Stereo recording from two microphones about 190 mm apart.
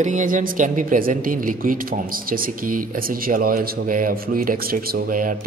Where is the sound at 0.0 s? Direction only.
40° right (ahead or behind).